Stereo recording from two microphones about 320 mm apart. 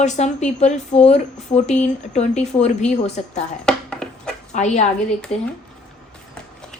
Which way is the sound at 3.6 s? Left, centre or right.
Centre.